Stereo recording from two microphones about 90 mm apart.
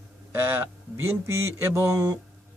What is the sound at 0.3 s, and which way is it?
Mantra, 25° right (ahead or behind).